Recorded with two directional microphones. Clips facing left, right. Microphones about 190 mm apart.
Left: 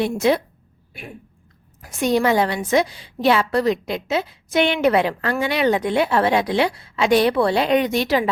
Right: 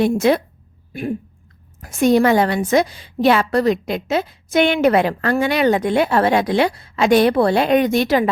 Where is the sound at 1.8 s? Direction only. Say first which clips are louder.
Right 5 dB; 50° right (ahead or behind).